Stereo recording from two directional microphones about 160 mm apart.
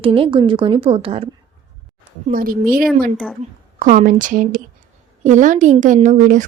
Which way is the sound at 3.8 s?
55° right (ahead or behind).